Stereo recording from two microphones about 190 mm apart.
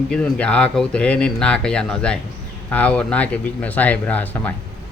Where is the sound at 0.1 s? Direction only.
5° left (ahead or behind).